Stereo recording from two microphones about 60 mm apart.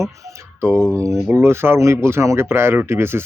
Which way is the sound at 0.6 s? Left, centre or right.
Right.